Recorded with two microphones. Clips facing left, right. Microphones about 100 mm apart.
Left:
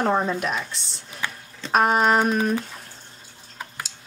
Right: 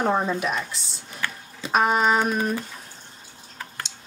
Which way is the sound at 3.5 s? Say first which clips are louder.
Left 1 dB; 10° left (ahead or behind).